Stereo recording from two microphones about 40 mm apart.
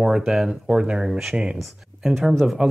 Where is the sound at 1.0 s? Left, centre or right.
Centre.